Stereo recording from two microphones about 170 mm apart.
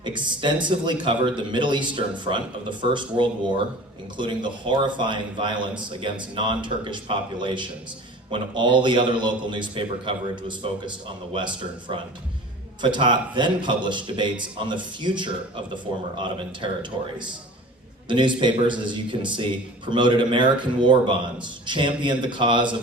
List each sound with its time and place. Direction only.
0.0 s a man's voice: 25° right (ahead or behind)